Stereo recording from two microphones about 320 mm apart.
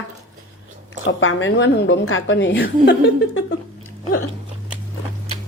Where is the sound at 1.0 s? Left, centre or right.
Left.